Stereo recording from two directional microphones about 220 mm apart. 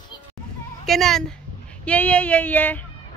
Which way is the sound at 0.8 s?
Centre (ahead or behind).